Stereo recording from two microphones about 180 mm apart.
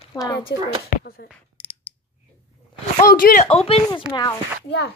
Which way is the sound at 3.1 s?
50° left (ahead or behind).